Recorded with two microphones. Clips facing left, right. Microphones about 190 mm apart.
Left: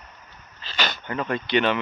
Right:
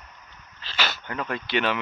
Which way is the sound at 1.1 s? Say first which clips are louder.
Left 6 dB; centre (ahead or behind).